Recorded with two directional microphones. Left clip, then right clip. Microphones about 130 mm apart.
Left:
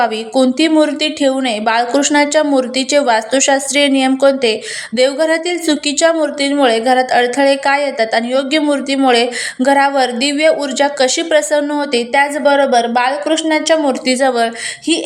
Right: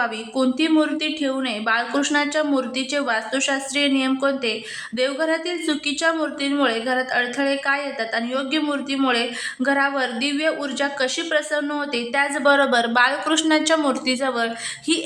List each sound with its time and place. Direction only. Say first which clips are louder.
0.0 s a woman's voice: left 9 dB; 35° left (ahead or behind)
12.5 s speech: left 4 dB; 10° left (ahead or behind)
14.1 s a woman's voice: left 9 dB; 30° left (ahead or behind)